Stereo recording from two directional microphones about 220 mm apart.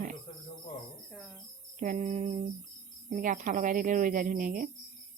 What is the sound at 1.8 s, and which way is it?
Speech, 35° right (ahead or behind).